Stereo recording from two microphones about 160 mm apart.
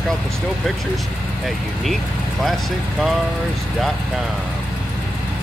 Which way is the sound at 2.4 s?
Centre (ahead or behind).